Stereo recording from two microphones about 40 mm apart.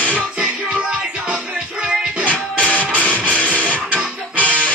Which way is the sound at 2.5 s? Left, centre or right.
Left.